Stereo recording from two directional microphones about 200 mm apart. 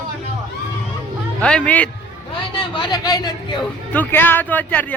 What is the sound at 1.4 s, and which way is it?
Speech, 5° left (ahead or behind).